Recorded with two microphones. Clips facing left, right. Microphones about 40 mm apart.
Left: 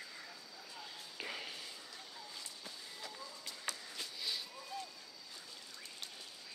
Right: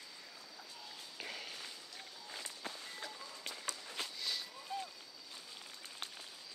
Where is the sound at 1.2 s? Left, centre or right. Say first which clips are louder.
Left 2 dB; centre.